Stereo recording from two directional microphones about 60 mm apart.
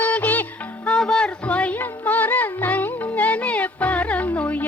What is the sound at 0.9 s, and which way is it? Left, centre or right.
Music, centre.